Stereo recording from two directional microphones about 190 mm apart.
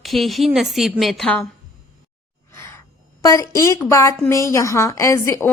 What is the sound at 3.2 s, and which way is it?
A woman's voice, 15° left (ahead or behind).